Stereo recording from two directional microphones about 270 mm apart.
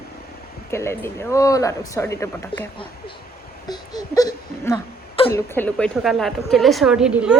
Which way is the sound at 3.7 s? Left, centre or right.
Centre.